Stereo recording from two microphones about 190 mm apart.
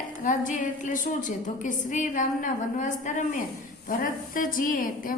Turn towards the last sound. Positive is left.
turn(degrees=45)  # may be behind; listen again after turning